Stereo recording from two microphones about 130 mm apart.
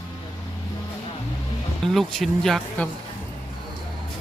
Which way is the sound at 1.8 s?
5° left (ahead or behind).